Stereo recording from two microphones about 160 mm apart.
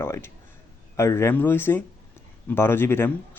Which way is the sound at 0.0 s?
15° left (ahead or behind).